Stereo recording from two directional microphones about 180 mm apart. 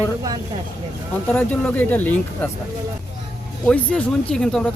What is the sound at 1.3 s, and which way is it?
Speech, 10° left (ahead or behind).